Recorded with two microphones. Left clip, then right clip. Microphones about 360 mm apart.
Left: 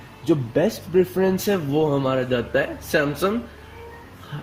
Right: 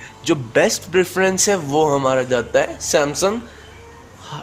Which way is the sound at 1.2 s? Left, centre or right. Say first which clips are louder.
Right 5 dB; right.